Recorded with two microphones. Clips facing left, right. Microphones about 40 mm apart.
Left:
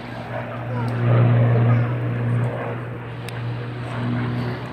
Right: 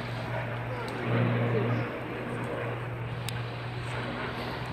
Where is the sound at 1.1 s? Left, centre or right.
Centre.